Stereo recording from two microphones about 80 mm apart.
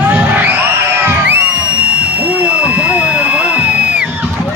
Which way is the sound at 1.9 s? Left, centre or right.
Centre.